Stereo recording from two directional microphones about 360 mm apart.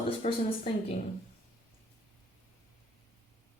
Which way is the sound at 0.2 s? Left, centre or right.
Centre.